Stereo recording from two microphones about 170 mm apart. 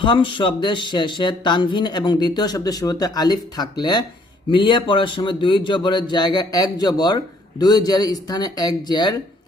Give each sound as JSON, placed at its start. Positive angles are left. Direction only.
{"t": 0.0, "sound": "speech", "side_deg": 30}